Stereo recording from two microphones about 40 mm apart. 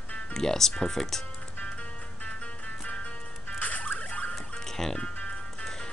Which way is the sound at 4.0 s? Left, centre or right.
Left.